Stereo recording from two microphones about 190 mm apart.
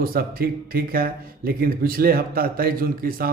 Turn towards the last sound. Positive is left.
turn(degrees=-50)  # may be behind; listen again after turning